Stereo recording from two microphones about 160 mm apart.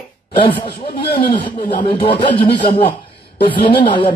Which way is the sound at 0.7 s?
90° left.